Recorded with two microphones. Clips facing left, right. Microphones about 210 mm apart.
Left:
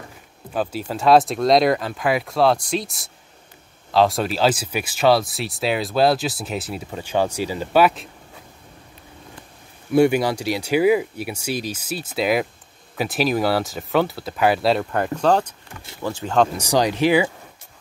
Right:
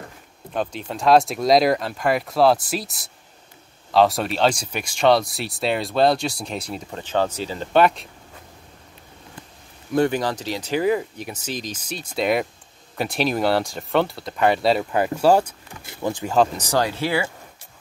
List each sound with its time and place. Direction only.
0.5 s speech: 5° left (ahead or behind)
9.9 s speech: 10° left (ahead or behind); by 16.3 s 15° right (ahead or behind)
16.5 s speech: 15° left (ahead or behind)